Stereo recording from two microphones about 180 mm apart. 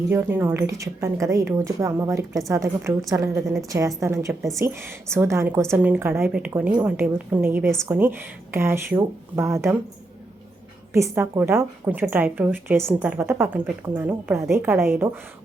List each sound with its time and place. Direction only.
0.1 s a woman's voice: 10° right (ahead or behind)
10.9 s a woman's voice: 15° right (ahead or behind)